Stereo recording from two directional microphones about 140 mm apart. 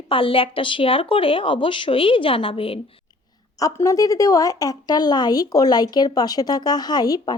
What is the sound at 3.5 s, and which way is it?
Speech, 25° left (ahead or behind).